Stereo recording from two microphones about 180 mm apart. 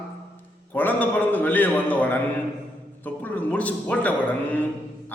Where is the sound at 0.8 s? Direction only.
10° left (ahead or behind).